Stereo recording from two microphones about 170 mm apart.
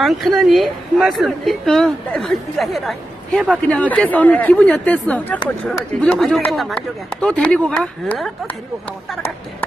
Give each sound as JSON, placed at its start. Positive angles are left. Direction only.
{"t": 0.0, "sound": "a woman's voice", "side_deg": 0}